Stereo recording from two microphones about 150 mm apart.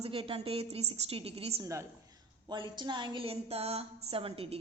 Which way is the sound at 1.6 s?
20° right (ahead or behind).